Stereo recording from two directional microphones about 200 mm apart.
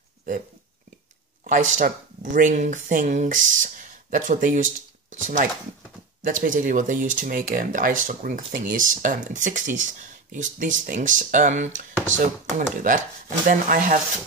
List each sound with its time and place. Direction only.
1.4 s speech: 40° right (ahead or behind)